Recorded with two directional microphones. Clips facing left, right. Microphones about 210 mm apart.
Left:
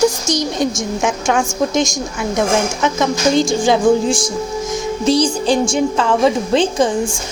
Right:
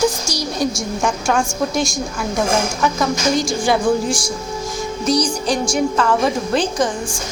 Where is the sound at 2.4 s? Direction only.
20° left (ahead or behind).